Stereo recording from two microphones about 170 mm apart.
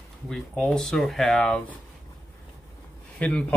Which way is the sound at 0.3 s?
5° left (ahead or behind).